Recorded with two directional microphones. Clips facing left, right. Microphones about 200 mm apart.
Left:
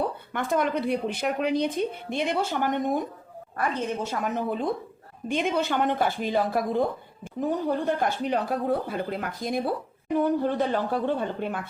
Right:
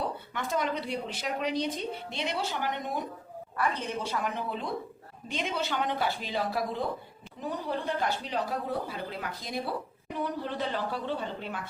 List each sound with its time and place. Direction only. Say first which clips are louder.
0.3 s speech: left 6 dB; 55° left (ahead or behind)
7.9 s speech: left 6 dB; 50° left (ahead or behind)